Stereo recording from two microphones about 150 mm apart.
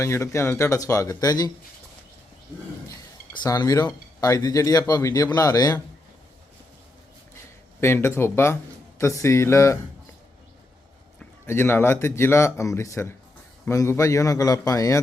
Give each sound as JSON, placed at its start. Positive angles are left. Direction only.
{"t": 0.0, "sound": "speech", "side_deg": 20}
{"t": 3.3, "sound": "speech", "side_deg": 25}
{"t": 7.8, "sound": "speech", "side_deg": 15}
{"t": 11.2, "sound": "speech", "side_deg": 15}